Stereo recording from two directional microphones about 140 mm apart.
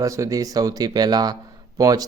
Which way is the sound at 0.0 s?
25° right (ahead or behind).